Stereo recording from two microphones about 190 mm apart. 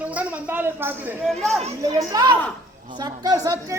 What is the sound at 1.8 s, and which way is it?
A child's voice, 20° right (ahead or behind).